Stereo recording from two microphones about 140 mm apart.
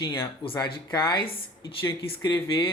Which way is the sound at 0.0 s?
15° left (ahead or behind).